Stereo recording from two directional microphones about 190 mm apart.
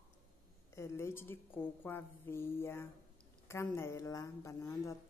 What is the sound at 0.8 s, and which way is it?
A woman's voice, 15° left (ahead or behind).